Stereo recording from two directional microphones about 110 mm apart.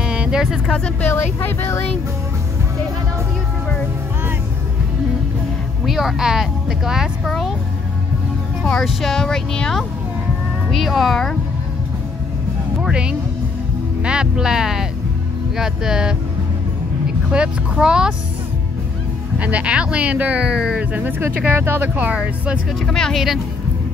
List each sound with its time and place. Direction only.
0.0 s music: 10° right (ahead or behind)
0.7 s speech: 10° left (ahead or behind)
1.1 s speech: 20° left (ahead or behind)
5.9 s speech: 5° right (ahead or behind)
8.6 s speech: 5° left (ahead or behind)
12.8 s speech: 10° right (ahead or behind)
17.3 s speech: 10° right (ahead or behind)
19.3 s speech: 10° right (ahead or behind)
22.8 s speech: 5° left (ahead or behind)